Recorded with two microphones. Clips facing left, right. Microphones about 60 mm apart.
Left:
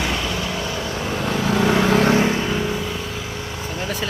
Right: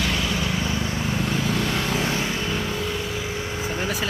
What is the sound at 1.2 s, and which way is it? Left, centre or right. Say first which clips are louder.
Vehicle: left 6 dB; left.